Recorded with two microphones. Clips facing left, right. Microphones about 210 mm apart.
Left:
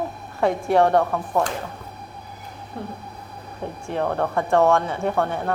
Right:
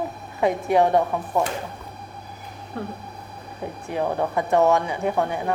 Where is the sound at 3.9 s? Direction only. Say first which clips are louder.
Left 1 dB; 10° right (ahead or behind).